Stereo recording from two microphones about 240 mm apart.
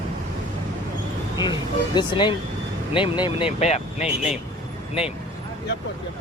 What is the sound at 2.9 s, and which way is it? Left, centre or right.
Speech, centre.